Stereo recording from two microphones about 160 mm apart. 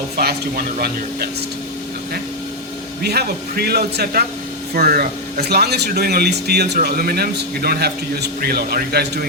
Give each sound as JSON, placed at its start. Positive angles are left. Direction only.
{"t": 0.2, "sound": "speech", "side_deg": -75}
{"t": 3.0, "sound": "speech", "side_deg": -85}